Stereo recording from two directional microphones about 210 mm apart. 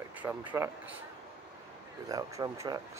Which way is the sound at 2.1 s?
15° right (ahead or behind).